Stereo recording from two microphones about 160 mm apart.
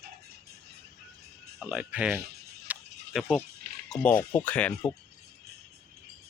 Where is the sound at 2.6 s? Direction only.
Centre (ahead or behind).